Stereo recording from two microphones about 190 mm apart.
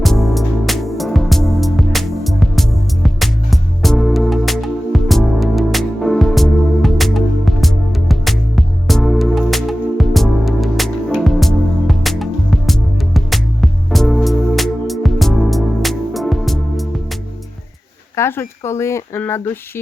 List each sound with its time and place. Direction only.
0.0 s music: centre (ahead or behind)
18.2 s speech: 15° left (ahead or behind)